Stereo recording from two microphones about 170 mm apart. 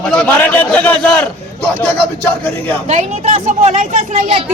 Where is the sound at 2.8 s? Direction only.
45° right (ahead or behind).